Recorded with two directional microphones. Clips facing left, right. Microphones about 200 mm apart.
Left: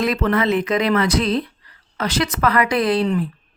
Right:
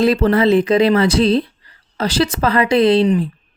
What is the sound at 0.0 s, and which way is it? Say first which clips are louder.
Speech: right 6 dB; 30° right (ahead or behind).